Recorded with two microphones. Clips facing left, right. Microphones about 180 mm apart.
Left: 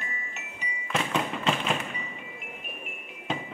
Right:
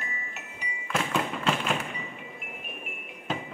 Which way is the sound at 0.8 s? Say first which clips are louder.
Even; centre (ahead or behind).